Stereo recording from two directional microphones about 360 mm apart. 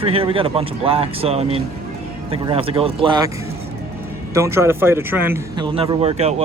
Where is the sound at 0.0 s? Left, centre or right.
Centre.